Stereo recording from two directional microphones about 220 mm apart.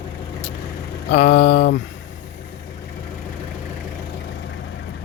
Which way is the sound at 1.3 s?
50° left (ahead or behind).